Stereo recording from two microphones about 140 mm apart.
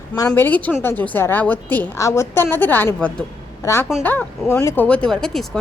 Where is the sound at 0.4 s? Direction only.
10° left (ahead or behind).